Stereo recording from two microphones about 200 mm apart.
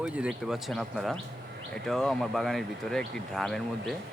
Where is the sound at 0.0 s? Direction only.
5° right (ahead or behind).